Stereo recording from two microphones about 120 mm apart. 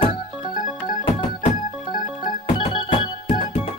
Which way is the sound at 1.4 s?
90° left.